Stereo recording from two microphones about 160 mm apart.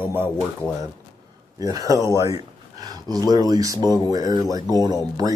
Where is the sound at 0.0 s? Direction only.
15° right (ahead or behind).